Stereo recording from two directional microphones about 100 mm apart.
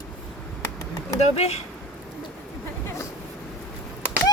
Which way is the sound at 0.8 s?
40° left (ahead or behind).